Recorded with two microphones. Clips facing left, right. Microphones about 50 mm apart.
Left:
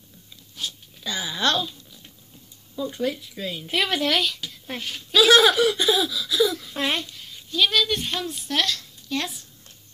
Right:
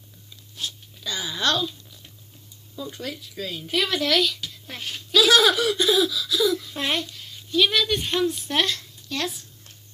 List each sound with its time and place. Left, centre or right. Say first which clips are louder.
0.6 s a sound: even; left
2.9 s speech: left 9 dB; centre
3.7 s speech: even; left
4.3 s a woman's voice: left 1 dB; centre
5.2 s speech: left 3 dB; left
7.2 s a sound: right 2 dB; centre
7.7 s a woman's voice: even; centre